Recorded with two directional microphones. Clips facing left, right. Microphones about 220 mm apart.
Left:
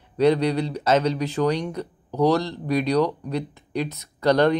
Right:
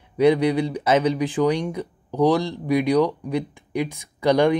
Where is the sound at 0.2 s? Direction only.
10° right (ahead or behind).